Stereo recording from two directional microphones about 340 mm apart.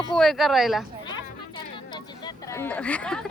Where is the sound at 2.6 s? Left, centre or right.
Centre.